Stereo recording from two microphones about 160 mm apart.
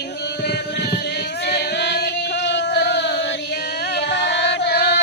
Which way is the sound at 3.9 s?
90° left.